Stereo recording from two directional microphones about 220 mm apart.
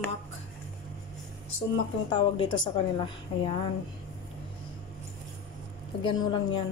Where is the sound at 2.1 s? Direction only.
20° left (ahead or behind).